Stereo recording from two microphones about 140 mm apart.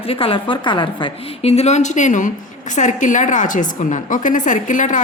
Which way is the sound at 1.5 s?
50° left (ahead or behind).